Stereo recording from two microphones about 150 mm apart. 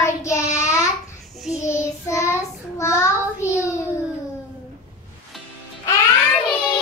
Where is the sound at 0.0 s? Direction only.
20° left (ahead or behind).